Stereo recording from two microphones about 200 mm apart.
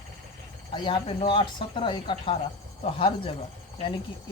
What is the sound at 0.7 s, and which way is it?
Speech, 25° left (ahead or behind).